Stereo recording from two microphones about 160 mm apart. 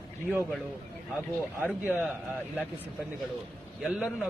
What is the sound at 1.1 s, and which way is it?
Speech, 10° right (ahead or behind).